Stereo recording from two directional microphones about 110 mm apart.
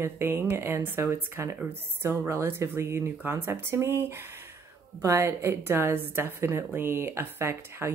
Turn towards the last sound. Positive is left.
turn(degrees=-20)  # may be behind; listen again after turning